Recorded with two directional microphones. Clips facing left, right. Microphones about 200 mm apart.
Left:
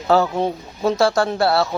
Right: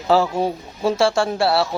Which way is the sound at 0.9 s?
25° right (ahead or behind).